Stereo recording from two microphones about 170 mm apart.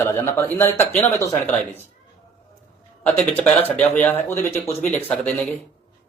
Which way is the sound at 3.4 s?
10° left (ahead or behind).